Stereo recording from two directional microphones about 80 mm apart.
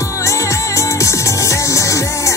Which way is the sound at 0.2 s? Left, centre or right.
Left.